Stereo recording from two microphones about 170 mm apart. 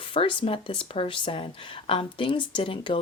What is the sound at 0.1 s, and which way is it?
Speech, 30° left (ahead or behind).